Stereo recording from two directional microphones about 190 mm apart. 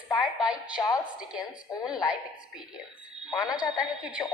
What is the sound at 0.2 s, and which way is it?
Speech, 5° right (ahead or behind).